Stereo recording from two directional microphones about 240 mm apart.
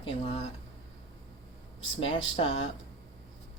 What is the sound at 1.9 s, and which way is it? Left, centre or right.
Speech, left.